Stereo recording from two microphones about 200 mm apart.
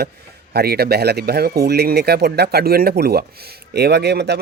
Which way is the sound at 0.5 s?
50° right (ahead or behind).